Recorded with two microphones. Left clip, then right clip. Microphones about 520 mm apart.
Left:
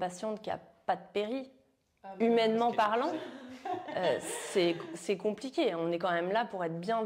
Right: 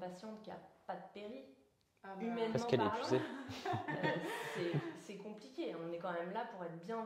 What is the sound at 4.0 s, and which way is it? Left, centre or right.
A woman's voice, left.